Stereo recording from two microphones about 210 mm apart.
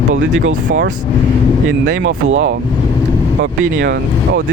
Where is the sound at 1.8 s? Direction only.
55° right (ahead or behind).